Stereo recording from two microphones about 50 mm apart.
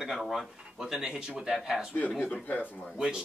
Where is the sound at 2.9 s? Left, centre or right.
Centre.